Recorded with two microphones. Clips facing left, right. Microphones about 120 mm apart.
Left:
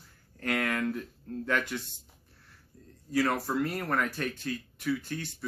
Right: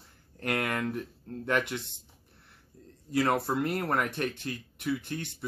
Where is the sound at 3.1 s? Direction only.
25° right (ahead or behind).